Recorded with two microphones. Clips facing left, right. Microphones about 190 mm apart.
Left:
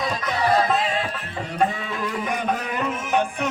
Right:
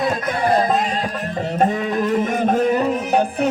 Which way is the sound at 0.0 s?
55° right (ahead or behind).